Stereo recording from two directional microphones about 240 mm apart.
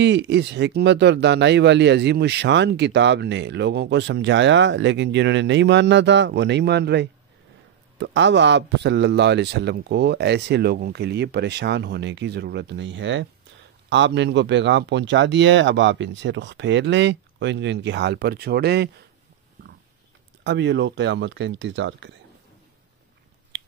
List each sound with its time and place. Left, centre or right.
0.0 s speech: right
20.4 s speech: right